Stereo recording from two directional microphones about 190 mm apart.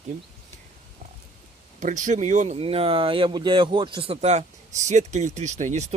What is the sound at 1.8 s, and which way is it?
Speech, 40° right (ahead or behind).